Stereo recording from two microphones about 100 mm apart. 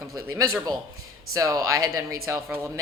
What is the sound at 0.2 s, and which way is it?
Speech, 35° right (ahead or behind).